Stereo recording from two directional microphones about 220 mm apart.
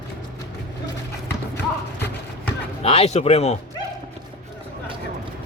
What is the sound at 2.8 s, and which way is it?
Speech, 25° left (ahead or behind).